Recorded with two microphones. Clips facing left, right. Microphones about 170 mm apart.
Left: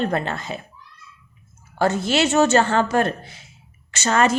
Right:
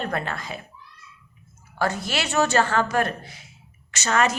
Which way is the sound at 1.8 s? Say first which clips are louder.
Left 7 dB; 25° left (ahead or behind).